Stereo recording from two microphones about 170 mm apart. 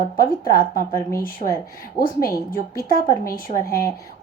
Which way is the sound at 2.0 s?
60° left (ahead or behind).